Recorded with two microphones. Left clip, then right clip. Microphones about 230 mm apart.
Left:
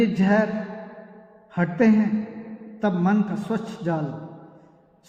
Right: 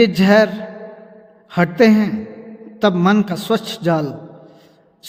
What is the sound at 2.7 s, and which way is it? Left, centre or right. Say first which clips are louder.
A man's voice: right 9 dB; right.